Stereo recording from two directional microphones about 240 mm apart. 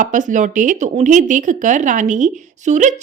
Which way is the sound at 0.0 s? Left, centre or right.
Right.